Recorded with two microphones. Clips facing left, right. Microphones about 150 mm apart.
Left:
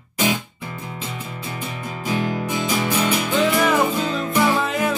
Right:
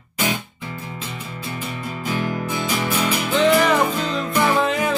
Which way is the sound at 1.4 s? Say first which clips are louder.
Right 3 dB; 20° left (ahead or behind).